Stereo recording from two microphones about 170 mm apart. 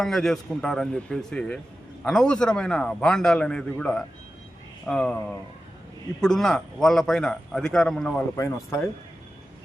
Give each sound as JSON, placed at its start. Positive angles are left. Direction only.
{"t": 0.0, "sound": "a man's voice", "side_deg": 0}
{"t": 8.4, "sound": "speech", "side_deg": 15}